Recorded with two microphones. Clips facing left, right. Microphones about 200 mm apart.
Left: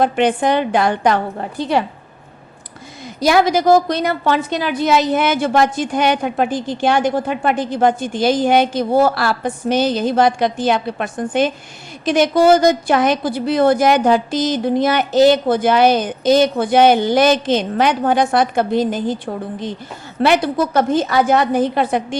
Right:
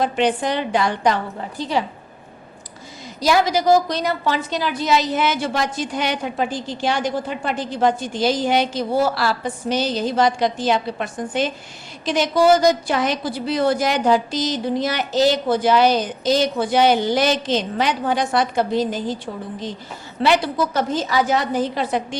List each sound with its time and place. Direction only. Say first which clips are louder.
0.0 s a woman's voice: left 4 dB; 55° left (ahead or behind)
3.2 s a woman's voice: left 4 dB; 55° left (ahead or behind)